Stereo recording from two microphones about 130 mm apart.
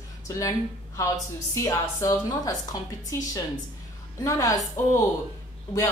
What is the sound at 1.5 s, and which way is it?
A woman's voice, 25° left (ahead or behind).